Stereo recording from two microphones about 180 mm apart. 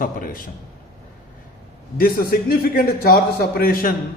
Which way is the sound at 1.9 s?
55° left (ahead or behind).